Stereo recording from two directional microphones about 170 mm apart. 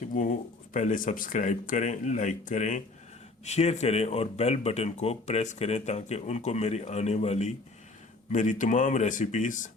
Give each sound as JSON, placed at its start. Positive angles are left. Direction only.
{"t": 0.1, "sound": "speech", "side_deg": 50}